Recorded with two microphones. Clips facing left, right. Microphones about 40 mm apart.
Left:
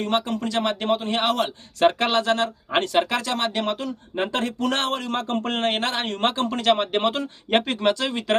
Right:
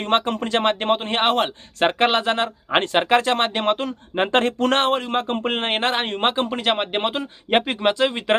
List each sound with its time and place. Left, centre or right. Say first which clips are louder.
0.0 s a man's voice: right 3 dB; right
4.8 s a man's voice: right 5 dB; right